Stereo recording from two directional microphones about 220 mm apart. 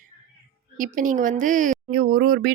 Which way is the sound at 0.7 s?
40° right (ahead or behind).